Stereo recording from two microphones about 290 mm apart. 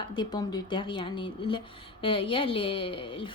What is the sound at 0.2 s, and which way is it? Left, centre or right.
Speech, centre.